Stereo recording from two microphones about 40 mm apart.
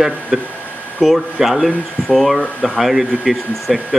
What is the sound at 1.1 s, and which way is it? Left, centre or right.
Speech, centre.